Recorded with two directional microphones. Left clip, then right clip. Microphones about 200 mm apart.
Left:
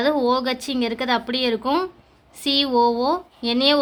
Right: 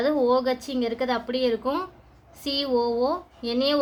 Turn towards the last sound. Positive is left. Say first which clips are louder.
# left 5 dB
turn(degrees=55)  # may be behind; listen again after turning